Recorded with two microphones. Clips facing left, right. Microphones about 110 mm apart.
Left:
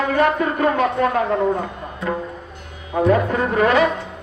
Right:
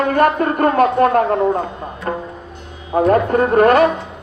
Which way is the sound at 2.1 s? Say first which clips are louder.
Right 1 dB; 45° right (ahead or behind).